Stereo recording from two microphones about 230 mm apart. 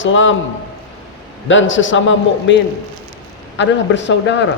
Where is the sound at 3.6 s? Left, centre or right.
Left.